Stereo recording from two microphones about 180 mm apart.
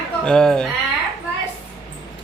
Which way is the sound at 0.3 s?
5° left (ahead or behind).